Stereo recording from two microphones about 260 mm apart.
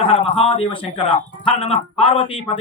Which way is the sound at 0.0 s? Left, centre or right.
Centre.